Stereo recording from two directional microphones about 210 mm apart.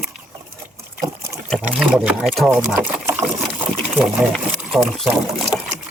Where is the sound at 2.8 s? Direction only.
10° right (ahead or behind).